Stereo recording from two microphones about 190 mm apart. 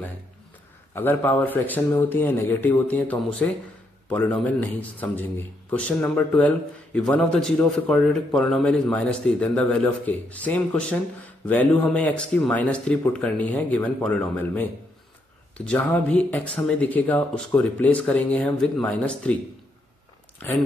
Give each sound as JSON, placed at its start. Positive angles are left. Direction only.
{"t": 0.9, "sound": "a man's voice", "side_deg": 10}
{"t": 20.4, "sound": "speech", "side_deg": 10}